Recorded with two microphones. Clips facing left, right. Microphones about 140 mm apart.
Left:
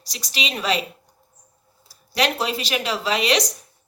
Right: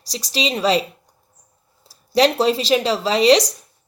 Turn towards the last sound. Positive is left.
turn(degrees=-35)  # may be behind; listen again after turning